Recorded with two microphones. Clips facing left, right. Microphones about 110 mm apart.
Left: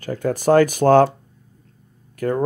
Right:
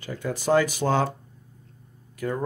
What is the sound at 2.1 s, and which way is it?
Speech, 50° left (ahead or behind).